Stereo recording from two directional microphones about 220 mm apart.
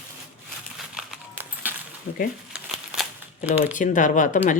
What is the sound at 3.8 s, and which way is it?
Speech, 35° left (ahead or behind).